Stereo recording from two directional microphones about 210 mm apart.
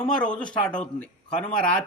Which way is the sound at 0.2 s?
5° left (ahead or behind).